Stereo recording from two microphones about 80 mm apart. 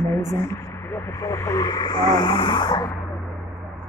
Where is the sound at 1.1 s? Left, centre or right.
Left.